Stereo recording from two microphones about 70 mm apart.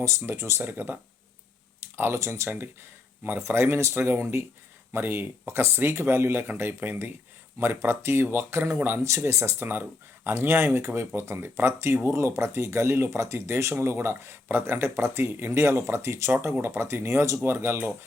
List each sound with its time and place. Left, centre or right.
0.2 s speech: right